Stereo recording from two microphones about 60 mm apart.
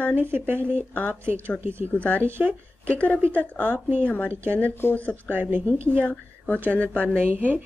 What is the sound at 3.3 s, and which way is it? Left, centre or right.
Speech, left.